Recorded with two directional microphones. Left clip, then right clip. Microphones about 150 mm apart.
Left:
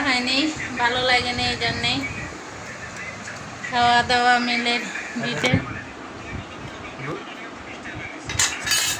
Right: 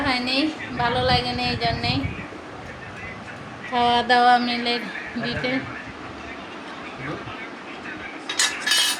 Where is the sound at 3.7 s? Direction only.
30° right (ahead or behind); by 4.8 s 10° right (ahead or behind).